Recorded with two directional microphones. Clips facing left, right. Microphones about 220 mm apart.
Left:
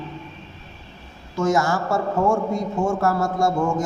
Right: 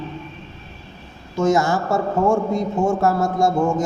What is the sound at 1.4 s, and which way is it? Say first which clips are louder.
A man's voice: right 3 dB; 20° right (ahead or behind).